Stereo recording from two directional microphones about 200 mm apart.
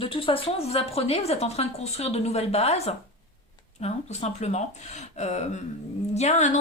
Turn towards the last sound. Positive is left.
turn(degrees=35)  # may be behind; listen again after turning